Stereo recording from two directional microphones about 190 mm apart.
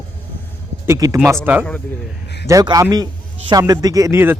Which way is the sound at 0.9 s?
15° right (ahead or behind).